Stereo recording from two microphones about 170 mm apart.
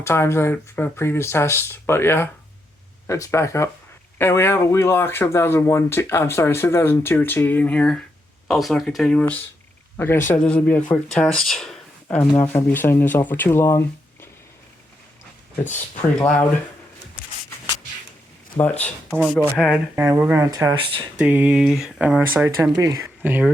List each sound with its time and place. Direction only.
0.0 s speech: 15° left (ahead or behind)
12.4 s speech: 10° left (ahead or behind)
16.2 s speech: 10° left (ahead or behind)
19.2 s speech: centre (ahead or behind); by 21.0 s 25° right (ahead or behind)
21.2 s speech: 10° right (ahead or behind)